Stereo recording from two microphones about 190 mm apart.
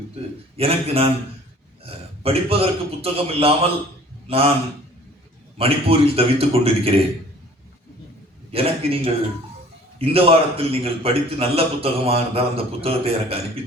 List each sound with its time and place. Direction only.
0.5 s a man's voice: 30° right (ahead or behind)
5.5 s a man's voice: 30° right (ahead or behind)
8.5 s a man's voice: 30° right (ahead or behind)
10.0 s a man's voice: 30° right (ahead or behind)